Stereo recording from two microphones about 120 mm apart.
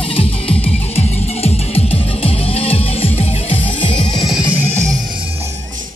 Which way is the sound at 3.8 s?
45° left (ahead or behind).